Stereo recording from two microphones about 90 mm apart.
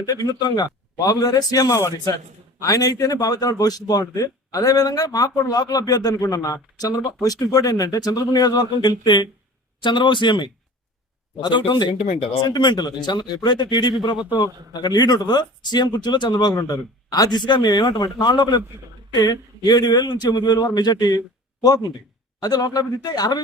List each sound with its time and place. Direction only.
0.0 s speech: 45° left (ahead or behind); by 11.9 s 65° left (ahead or behind)
12.4 s speech: 55° left (ahead or behind)
14.2 s a man's voice: 20° right (ahead or behind)
14.4 s speech: 45° left (ahead or behind)
19.1 s speech: 45° left (ahead or behind)